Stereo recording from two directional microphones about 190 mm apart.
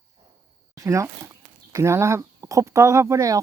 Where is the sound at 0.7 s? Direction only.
15° right (ahead or behind).